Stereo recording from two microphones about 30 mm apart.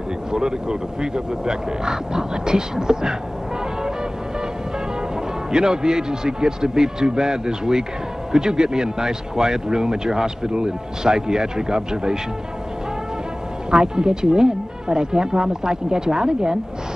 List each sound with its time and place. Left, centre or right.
0.3 s speech: right
5.5 s speech: right
13.7 s speech: right